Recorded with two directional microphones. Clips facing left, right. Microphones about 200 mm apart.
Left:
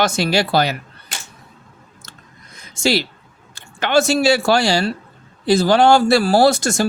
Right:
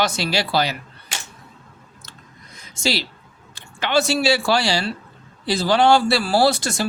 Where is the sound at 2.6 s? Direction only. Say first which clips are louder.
Left 6 dB; 50° left (ahead or behind).